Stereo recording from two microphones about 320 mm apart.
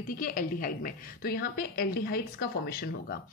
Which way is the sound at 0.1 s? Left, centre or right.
Left.